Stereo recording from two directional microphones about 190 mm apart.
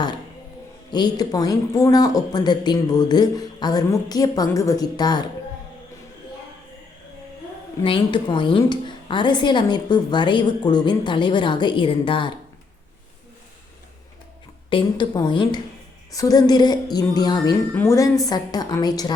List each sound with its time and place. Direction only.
0.9 s a woman's voice: 25° left (ahead or behind)
7.9 s a woman's voice: 25° left (ahead or behind)
14.7 s a woman's voice: 25° left (ahead or behind)